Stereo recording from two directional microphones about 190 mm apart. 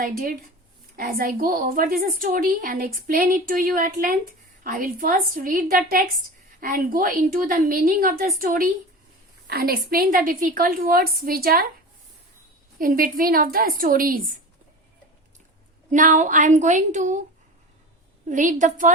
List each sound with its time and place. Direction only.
0.0 s a woman's voice: 50° right (ahead or behind)
12.8 s a woman's voice: 45° right (ahead or behind)
15.9 s a woman's voice: 40° right (ahead or behind)
18.3 s a woman's voice: 40° right (ahead or behind)